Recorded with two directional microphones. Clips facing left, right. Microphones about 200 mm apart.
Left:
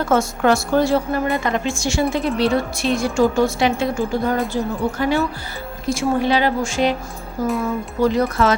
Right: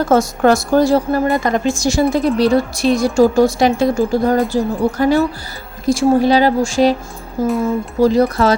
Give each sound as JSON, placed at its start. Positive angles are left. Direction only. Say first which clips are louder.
{"t": 0.0, "sound": "a woman's voice", "louder": "right 4 dB", "side_deg": -40}